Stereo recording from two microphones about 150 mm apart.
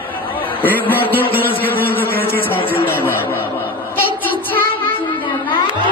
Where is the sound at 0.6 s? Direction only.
10° left (ahead or behind).